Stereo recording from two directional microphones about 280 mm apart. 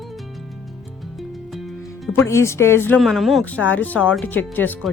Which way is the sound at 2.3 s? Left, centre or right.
Centre.